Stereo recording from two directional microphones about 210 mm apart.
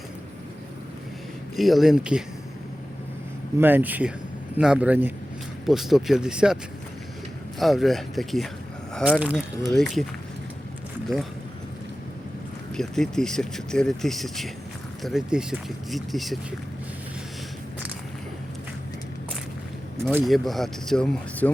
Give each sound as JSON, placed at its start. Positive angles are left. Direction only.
{"t": 1.5, "sound": "speech", "side_deg": 0}
{"t": 3.6, "sound": "a man's voice", "side_deg": -10}
{"t": 7.6, "sound": "speech", "side_deg": 0}
{"t": 12.7, "sound": "speech", "side_deg": 0}
{"t": 20.1, "sound": "speech", "side_deg": -5}